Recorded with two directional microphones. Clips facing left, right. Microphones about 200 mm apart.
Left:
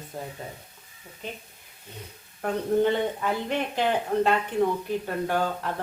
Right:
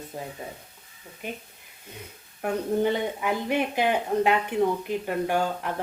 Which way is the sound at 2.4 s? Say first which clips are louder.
Left 1 dB; 10° right (ahead or behind).